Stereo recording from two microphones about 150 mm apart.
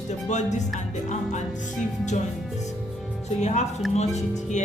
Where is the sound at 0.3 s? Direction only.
50° left (ahead or behind).